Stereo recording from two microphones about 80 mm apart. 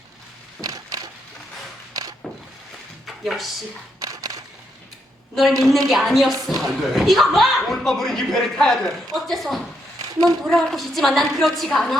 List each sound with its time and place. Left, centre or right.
0.6 s crushing: right
2.0 s a sound: right
3.1 s speech: centre
4.0 s single-lens reflex camera: right
5.3 s a woman's voice: centre